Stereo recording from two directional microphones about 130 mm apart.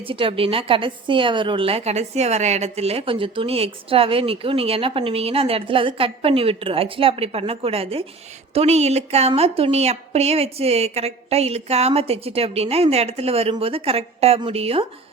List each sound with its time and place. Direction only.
0.1 s a woman's voice: 45° right (ahead or behind)